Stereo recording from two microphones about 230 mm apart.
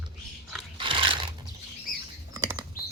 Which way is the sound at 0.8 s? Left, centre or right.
Right.